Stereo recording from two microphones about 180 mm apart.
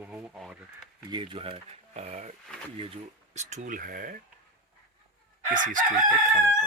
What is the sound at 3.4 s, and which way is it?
Speech, 40° right (ahead or behind).